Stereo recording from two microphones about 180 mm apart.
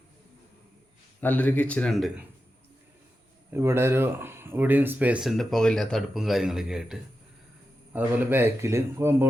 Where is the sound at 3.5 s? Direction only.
15° right (ahead or behind).